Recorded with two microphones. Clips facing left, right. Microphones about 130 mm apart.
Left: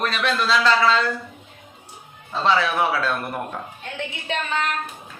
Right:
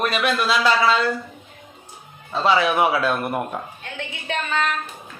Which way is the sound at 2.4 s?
15° right (ahead or behind).